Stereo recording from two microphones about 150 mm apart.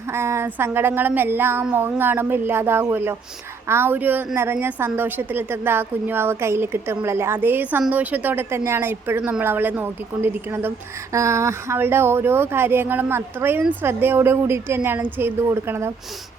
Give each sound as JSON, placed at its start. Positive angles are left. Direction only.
{"t": 0.1, "sound": "a woman's voice", "side_deg": -15}